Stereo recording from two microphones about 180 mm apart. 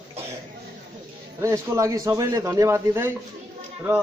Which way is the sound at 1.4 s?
15° right (ahead or behind).